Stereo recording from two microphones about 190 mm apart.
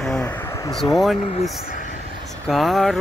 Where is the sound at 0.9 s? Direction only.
Centre (ahead or behind).